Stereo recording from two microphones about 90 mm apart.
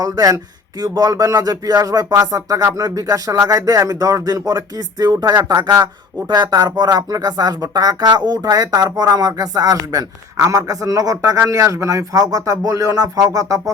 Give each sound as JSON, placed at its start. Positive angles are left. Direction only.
{"t": 0.0, "sound": "speech", "side_deg": -40}